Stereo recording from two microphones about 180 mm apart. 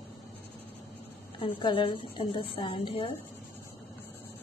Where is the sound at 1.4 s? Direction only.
30° left (ahead or behind).